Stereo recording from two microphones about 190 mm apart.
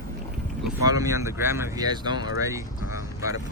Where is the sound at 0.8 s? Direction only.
20° right (ahead or behind).